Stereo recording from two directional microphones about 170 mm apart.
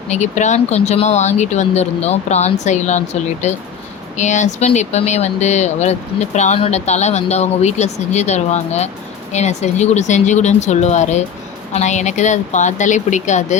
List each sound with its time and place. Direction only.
0.1 s speech: 45° left (ahead or behind)